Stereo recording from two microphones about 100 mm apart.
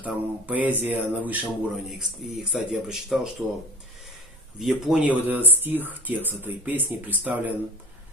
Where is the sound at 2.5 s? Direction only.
Centre (ahead or behind).